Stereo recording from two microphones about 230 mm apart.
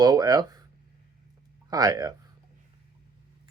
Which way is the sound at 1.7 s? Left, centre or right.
Centre.